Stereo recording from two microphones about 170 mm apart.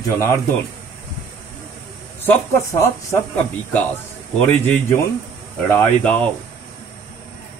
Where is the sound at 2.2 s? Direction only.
15° left (ahead or behind).